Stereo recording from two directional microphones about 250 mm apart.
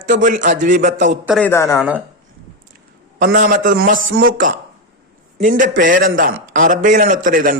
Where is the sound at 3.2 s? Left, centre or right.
Right.